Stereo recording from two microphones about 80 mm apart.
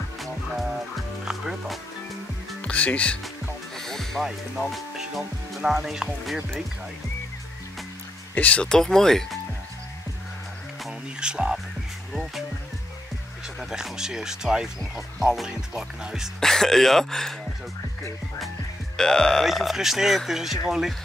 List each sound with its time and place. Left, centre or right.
0.2 s music: centre
2.6 s speech: centre
3.7 s speech: centre
8.4 s speech: centre
11.1 s speech: centre
13.6 s speech: centre
16.3 s speech: centre
18.9 s speech: centre